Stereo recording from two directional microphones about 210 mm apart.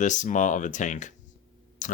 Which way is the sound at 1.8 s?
40° left (ahead or behind).